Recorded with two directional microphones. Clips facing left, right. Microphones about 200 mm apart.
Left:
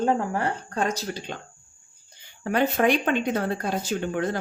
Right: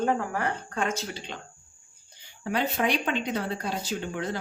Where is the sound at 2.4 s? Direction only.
50° left (ahead or behind).